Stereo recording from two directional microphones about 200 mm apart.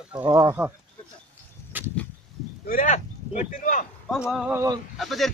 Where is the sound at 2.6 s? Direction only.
40° left (ahead or behind).